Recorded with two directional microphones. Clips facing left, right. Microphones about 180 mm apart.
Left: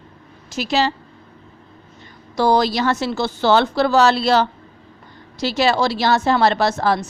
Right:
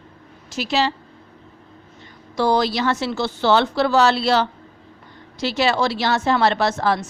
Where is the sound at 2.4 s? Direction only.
40° left (ahead or behind).